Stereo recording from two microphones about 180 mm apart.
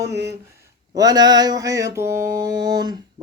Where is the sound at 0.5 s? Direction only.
15° right (ahead or behind).